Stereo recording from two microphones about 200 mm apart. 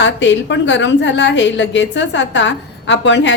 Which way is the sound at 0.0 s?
65° left (ahead or behind).